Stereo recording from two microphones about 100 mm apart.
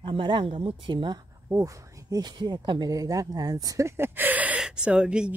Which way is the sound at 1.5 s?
35° right (ahead or behind).